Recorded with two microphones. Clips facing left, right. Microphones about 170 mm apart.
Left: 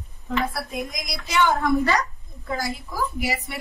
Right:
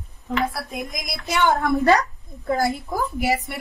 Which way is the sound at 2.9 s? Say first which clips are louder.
Right 4 dB; 55° right (ahead or behind).